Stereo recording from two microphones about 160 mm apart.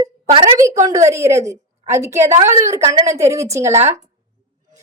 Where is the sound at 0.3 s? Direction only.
35° right (ahead or behind).